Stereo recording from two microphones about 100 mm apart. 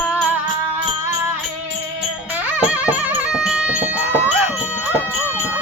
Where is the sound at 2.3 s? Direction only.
15° right (ahead or behind).